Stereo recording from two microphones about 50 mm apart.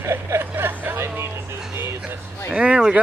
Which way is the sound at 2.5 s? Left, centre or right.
Right.